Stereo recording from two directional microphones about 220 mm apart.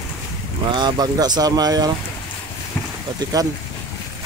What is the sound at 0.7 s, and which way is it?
Speech, 20° right (ahead or behind).